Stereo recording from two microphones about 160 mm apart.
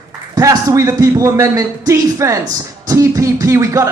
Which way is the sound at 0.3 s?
20° right (ahead or behind).